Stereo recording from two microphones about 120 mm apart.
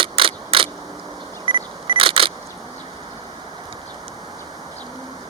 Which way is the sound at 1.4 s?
40° right (ahead or behind).